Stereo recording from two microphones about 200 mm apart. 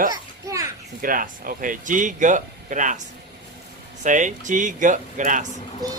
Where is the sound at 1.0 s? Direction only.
45° right (ahead or behind).